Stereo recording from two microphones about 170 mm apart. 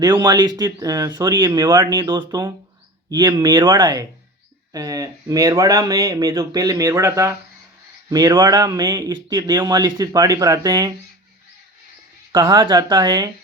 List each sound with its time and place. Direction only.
0.0 s a man's voice: 25° right (ahead or behind)
12.3 s a man's voice: 25° right (ahead or behind)